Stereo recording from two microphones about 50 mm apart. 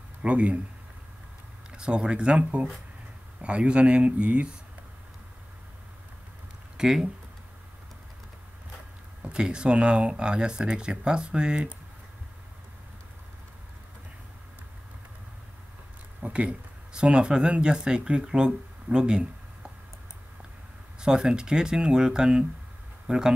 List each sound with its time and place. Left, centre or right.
0.2 s speech: right
1.7 s speech: centre
6.8 s speech: centre
9.3 s speech: centre
16.2 s speech: right
21.0 s speech: centre